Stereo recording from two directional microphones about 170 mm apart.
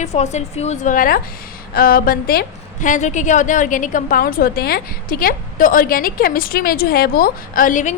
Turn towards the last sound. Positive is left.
turn(degrees=50)  # may be behind; listen again after turning